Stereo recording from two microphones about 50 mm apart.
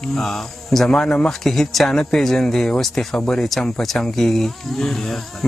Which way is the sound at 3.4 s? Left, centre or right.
Centre.